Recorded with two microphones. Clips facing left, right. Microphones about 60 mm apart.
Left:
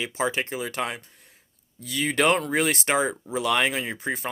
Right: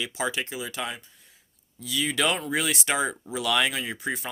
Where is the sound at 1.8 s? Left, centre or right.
Left.